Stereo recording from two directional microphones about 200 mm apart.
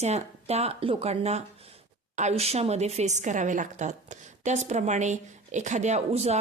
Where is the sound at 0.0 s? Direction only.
35° right (ahead or behind).